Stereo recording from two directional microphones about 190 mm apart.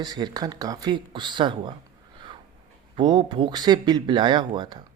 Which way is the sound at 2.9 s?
25° right (ahead or behind).